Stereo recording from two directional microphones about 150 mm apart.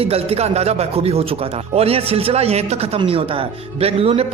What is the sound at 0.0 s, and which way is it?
Speech, 40° right (ahead or behind).